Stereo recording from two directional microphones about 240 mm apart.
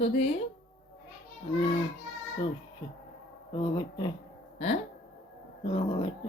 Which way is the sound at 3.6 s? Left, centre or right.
Centre.